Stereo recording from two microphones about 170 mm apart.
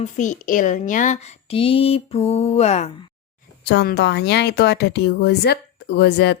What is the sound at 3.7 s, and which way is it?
Speech, 75° left (ahead or behind).